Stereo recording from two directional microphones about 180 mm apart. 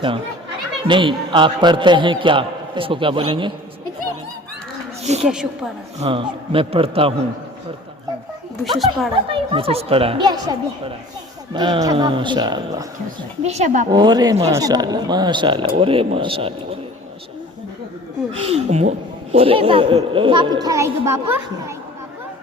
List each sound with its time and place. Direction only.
0.9 s a woman's voice: 25° right (ahead or behind)
5.2 s speech: 5° right (ahead or behind)
6.0 s speech: 30° right (ahead or behind)
8.6 s speech: centre (ahead or behind)
9.3 s a woman's voice: 30° right (ahead or behind)
13.1 s speech: 40° right (ahead or behind)
13.9 s a woman's voice: 25° right (ahead or behind)
18.3 s a woman's voice: 35° right (ahead or behind); by 21.4 s 15° right (ahead or behind)